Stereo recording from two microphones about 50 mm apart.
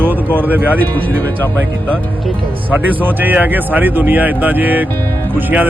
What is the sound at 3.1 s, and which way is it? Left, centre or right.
Speech, right.